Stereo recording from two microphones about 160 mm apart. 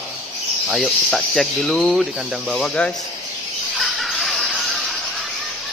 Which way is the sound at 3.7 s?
Centre (ahead or behind).